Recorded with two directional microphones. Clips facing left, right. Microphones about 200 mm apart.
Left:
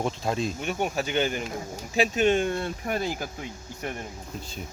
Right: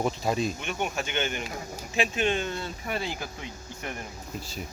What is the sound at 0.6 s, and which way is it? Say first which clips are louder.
Speech: left 3 dB; 40° left (ahead or behind).